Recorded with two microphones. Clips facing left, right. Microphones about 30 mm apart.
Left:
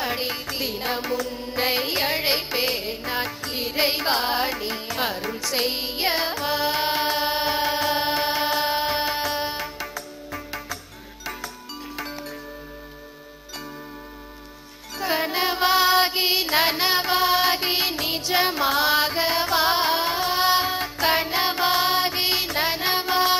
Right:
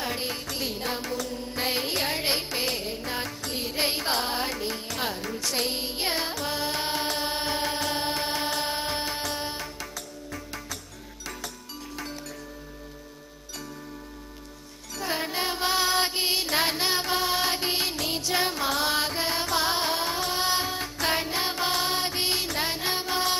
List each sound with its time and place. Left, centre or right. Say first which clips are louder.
0.0 s music: left 4 dB; centre
5.5 s carnatic music: left 5 dB; left
11.9 s music: left 4 dB; left
14.9 s music: left 5 dB; centre